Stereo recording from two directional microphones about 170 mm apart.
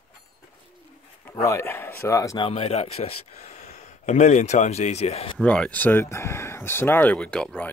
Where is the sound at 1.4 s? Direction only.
15° left (ahead or behind).